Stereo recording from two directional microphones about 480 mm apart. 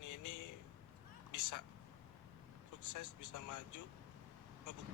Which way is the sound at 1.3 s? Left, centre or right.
Left.